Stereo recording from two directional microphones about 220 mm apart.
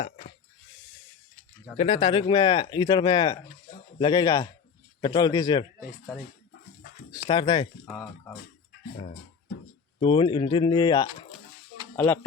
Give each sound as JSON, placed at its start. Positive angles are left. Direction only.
{"t": 1.7, "sound": "speech", "side_deg": 25}
{"t": 3.7, "sound": "a sound", "side_deg": 20}
{"t": 4.9, "sound": "speech", "side_deg": 20}
{"t": 7.3, "sound": "speech", "side_deg": 20}
{"t": 7.9, "sound": "speech", "side_deg": 5}
{"t": 10.0, "sound": "speech", "side_deg": 20}